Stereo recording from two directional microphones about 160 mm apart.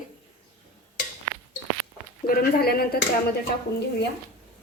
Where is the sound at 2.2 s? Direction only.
65° left (ahead or behind).